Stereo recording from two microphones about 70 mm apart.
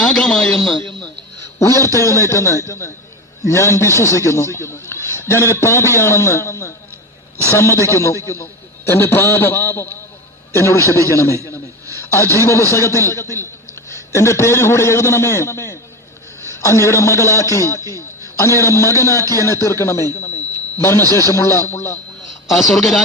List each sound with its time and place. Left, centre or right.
0.0 s a man's voice: centre
1.5 s a man's voice: left
8.9 s a man's voice: left
22.4 s a man's voice: centre